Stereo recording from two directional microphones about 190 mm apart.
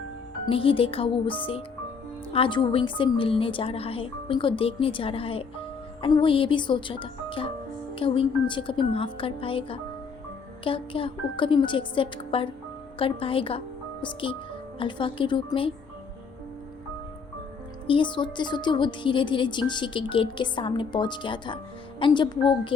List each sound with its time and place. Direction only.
0.4 s a woman's voice: 30° left (ahead or behind)
17.8 s a woman's voice: 25° left (ahead or behind)